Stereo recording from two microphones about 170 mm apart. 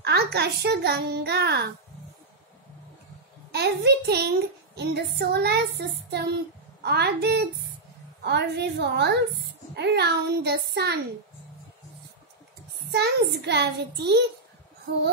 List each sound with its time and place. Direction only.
0.0 s a woman's voice: 75° right (ahead or behind)
3.5 s a woman's voice: 80° right
12.9 s a child's voice: 75° right (ahead or behind)